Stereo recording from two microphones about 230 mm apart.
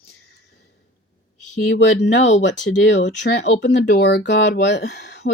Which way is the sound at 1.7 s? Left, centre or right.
Left.